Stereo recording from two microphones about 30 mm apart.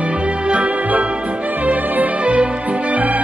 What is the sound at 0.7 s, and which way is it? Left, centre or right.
Music, right.